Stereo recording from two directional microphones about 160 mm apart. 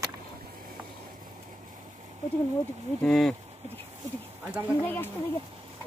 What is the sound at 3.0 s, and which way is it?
Speech, centre (ahead or behind).